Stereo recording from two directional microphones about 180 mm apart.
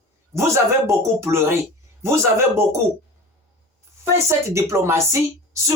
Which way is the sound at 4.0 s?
15° right (ahead or behind).